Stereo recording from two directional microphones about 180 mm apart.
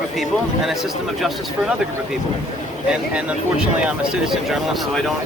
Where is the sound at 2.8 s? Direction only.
5° right (ahead or behind).